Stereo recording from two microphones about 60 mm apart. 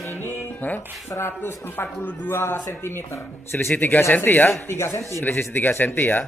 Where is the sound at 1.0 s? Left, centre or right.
Left.